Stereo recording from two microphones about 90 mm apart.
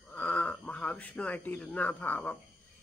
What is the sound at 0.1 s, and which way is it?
Speech, 15° left (ahead or behind).